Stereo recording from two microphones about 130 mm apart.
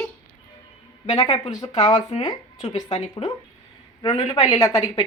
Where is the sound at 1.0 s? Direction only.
30° left (ahead or behind).